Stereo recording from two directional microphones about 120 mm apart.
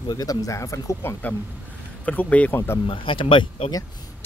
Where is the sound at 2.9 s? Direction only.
45° left (ahead or behind).